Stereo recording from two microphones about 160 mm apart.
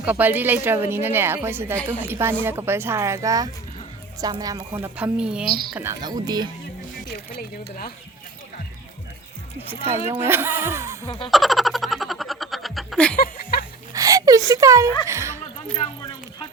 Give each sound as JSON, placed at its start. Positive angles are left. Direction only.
{"t": 0.0, "sound": "speech", "side_deg": -10}
{"t": 4.8, "sound": "speech", "side_deg": -10}
{"t": 6.0, "sound": "speech", "side_deg": -25}
{"t": 7.1, "sound": "speech", "side_deg": 70}
{"t": 10.1, "sound": "speech", "side_deg": -15}
{"t": 11.3, "sound": "a sound", "side_deg": 0}
{"t": 13.1, "sound": "chuckle", "side_deg": 65}
{"t": 13.9, "sound": "a sound", "side_deg": -20}
{"t": 15.0, "sound": "speech", "side_deg": -15}
{"t": 15.8, "sound": "a sound", "side_deg": 30}